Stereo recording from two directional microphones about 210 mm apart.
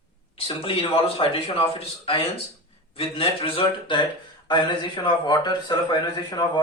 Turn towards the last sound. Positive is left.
turn(degrees=20)  # may be behind; listen again after turning